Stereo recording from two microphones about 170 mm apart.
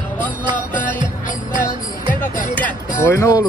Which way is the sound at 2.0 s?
55° left (ahead or behind).